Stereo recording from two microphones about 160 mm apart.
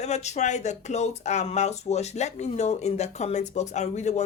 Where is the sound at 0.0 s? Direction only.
45° left (ahead or behind).